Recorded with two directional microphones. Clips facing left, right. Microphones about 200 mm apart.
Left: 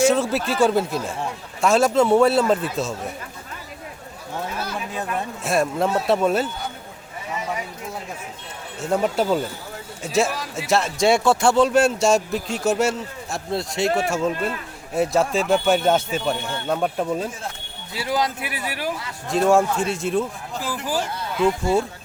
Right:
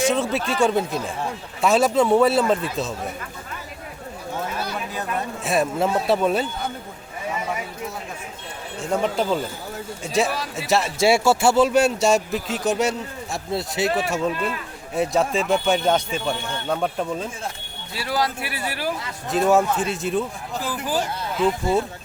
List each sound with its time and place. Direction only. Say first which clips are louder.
0.0 s speech: left 3 dB; centre (ahead or behind)
5.0 s speech: right 1 dB; centre (ahead or behind)
8.9 s speech: left 2 dB; 5° left (ahead or behind)
17.9 s speech: left 1 dB; 20° left (ahead or behind)
19.3 s speech: left 1 dB; centre (ahead or behind)
21.3 s speech: left 1 dB; centre (ahead or behind)